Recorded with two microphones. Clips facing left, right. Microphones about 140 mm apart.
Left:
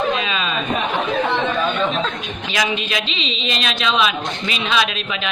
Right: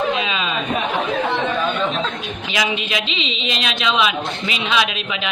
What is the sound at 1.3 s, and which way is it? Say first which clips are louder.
Chatter: left 1 dB; 10° right (ahead or behind).